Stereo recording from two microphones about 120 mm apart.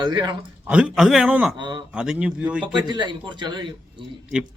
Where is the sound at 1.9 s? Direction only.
5° right (ahead or behind).